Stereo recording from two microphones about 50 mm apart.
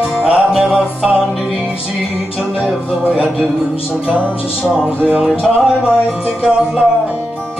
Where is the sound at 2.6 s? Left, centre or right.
Centre.